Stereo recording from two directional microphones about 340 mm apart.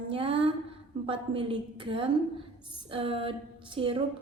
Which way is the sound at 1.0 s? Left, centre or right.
Centre.